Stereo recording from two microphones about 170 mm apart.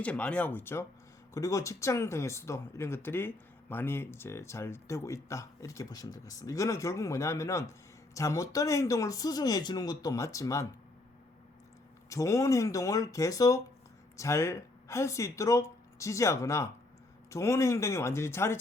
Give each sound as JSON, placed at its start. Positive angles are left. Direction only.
{"t": 0.0, "sound": "speech", "side_deg": 5}
{"t": 12.0, "sound": "speech", "side_deg": 20}